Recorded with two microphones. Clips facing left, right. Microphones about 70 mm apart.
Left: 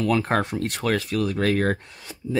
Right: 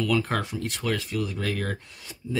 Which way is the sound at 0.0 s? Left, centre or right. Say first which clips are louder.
Left 4 dB; left.